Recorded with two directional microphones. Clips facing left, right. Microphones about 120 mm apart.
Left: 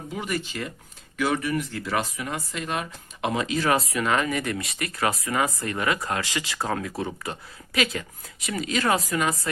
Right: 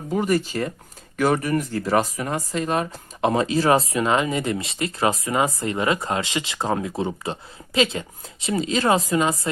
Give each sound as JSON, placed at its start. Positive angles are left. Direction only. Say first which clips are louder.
{"t": 0.1, "sound": "speech", "louder": "right 9 dB", "side_deg": -40}